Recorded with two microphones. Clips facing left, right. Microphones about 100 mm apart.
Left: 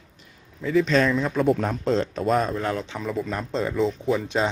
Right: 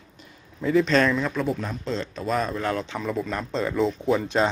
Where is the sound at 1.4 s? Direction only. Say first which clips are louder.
Left 6 dB; 55° left (ahead or behind).